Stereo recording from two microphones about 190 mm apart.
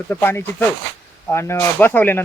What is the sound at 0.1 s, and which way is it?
Speech, 10° left (ahead or behind).